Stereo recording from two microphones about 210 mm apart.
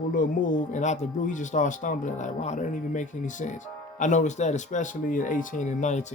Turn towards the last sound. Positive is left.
turn(degrees=35)  # may be behind; listen again after turning